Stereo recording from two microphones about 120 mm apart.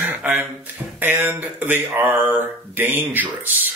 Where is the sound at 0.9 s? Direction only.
15° right (ahead or behind).